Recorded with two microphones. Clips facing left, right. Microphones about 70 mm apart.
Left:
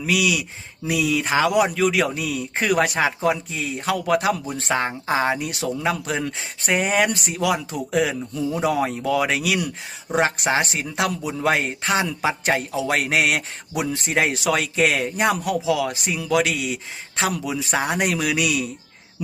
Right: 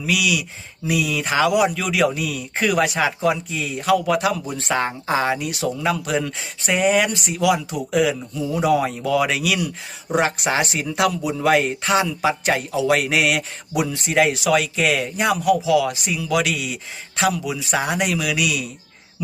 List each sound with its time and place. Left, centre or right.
0.0 s speech: left
1.5 s speech: left
4.7 s speech: centre; by 18.7 s left